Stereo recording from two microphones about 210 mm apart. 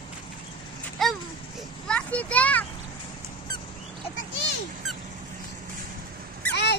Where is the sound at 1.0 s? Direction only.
Centre (ahead or behind).